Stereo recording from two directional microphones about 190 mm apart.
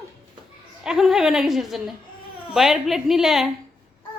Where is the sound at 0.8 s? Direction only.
Centre (ahead or behind).